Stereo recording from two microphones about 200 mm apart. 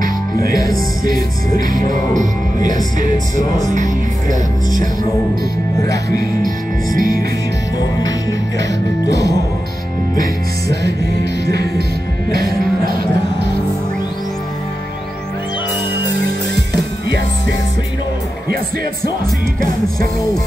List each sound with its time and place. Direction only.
0.0 s music: 45° right (ahead or behind)
5.8 s music: 15° left (ahead or behind)
6.4 s music: 45° right (ahead or behind)
8.0 s music: 20° left (ahead or behind)